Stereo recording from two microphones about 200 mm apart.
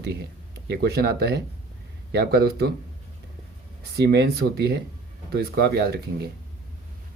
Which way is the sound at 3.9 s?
55° right (ahead or behind).